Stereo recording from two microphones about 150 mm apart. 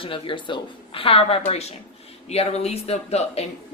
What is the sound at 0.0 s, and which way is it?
Speech, 35° left (ahead or behind).